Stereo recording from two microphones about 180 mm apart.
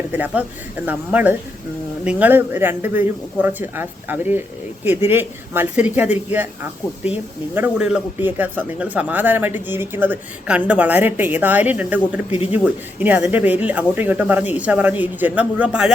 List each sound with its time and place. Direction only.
0.1 s speech: 10° right (ahead or behind)
12.3 s speech: 35° left (ahead or behind)
12.6 s speech: 10° right (ahead or behind)